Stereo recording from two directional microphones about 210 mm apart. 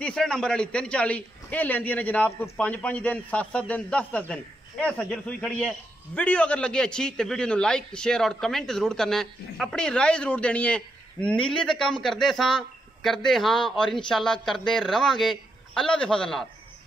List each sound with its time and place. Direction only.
0.0 s a man's voice: 5° left (ahead or behind)